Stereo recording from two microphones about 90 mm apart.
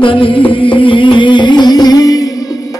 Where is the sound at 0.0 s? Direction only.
75° left (ahead or behind).